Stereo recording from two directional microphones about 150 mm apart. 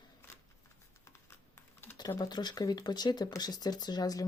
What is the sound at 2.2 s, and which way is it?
Speech, 30° left (ahead or behind).